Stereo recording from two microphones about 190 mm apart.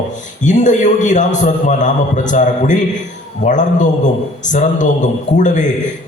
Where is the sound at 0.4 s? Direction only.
40° left (ahead or behind).